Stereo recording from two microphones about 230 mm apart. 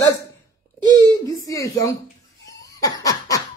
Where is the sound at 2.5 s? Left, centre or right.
Centre.